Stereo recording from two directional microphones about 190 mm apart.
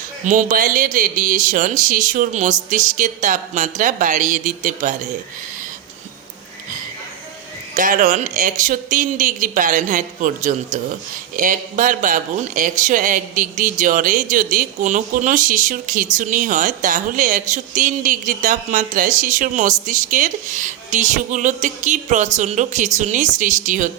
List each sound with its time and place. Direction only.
0.3 s speech: 45° right (ahead or behind)
7.8 s speech: 45° right (ahead or behind)